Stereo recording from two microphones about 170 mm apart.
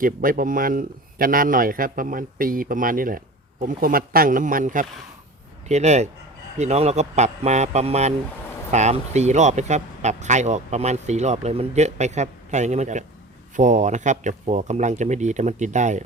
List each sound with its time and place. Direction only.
0.0 s a man's voice: 55° right (ahead or behind)